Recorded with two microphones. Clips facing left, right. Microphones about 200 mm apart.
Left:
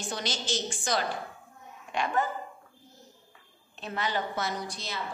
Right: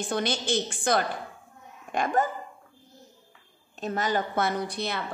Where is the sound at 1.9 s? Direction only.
45° right (ahead or behind).